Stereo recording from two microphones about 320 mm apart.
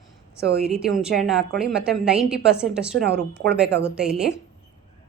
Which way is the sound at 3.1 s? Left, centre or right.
Right.